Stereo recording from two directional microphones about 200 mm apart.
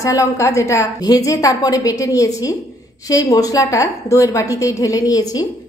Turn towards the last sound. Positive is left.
turn(degrees=20)  # may be behind; listen again after turning